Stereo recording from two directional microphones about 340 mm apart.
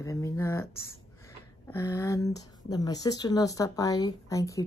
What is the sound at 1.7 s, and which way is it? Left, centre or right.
A woman's voice, centre.